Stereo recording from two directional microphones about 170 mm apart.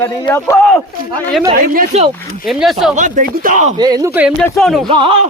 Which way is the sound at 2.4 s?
Centre (ahead or behind).